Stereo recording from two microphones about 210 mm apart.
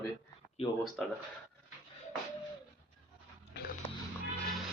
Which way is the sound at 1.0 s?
Centre (ahead or behind).